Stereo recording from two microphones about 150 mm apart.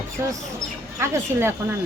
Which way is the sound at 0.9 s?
15° right (ahead or behind).